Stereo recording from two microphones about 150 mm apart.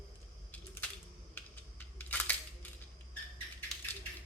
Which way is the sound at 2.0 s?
10° left (ahead or behind).